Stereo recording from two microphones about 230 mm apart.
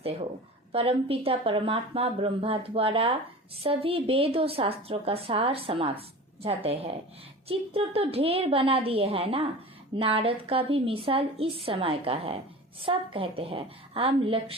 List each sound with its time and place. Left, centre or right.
0.7 s a woman's voice: right